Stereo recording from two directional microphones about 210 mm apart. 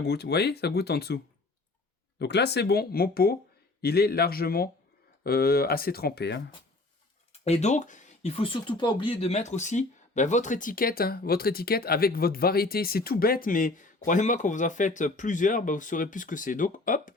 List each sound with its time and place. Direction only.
0.0 s speech: 50° left (ahead or behind)
7.4 s speech: 30° left (ahead or behind)